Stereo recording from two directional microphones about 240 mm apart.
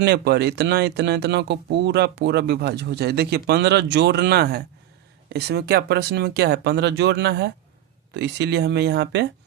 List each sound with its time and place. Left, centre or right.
0.0 s speech: right